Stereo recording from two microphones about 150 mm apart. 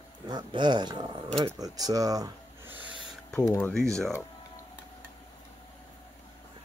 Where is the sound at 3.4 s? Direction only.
15° left (ahead or behind).